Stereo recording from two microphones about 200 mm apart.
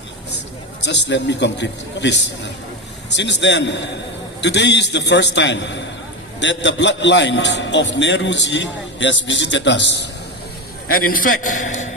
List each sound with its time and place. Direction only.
0.9 s a man's voice: 60° left (ahead or behind)
10.8 s a man's voice: 45° left (ahead or behind)